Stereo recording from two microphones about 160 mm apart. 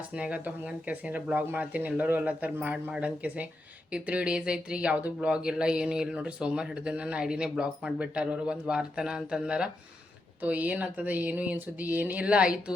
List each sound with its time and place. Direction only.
0.1 s speech: 10° right (ahead or behind)